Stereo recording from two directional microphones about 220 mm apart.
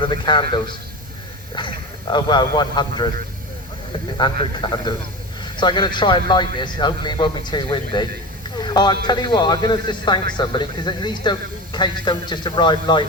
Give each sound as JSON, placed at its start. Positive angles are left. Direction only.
{"t": 0.1, "sound": "speech", "side_deg": 20}
{"t": 1.5, "sound": "speech", "side_deg": 20}
{"t": 4.2, "sound": "speech", "side_deg": 20}
{"t": 8.4, "sound": "a sound", "side_deg": 20}
{"t": 9.0, "sound": "speech", "side_deg": 20}